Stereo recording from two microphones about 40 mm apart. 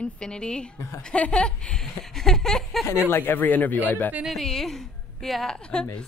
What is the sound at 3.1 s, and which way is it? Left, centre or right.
Speech, left.